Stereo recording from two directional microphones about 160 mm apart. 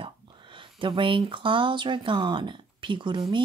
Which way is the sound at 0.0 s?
30° right (ahead or behind).